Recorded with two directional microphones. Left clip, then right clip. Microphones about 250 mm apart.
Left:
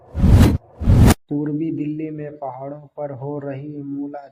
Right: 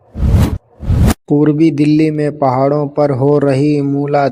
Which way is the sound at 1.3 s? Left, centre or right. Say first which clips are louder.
Right 13 dB; right.